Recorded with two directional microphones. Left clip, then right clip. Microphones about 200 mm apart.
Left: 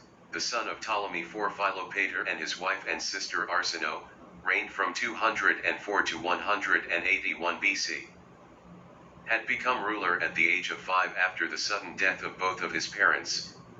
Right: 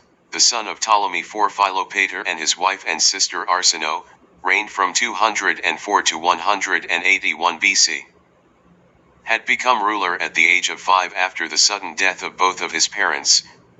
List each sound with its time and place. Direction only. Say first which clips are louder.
0.3 s speech: right 13 dB; 50° right (ahead or behind)
9.2 s speech: right 11 dB; 50° right (ahead or behind)